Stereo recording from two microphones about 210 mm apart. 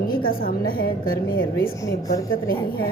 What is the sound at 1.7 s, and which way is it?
Speech, 15° left (ahead or behind).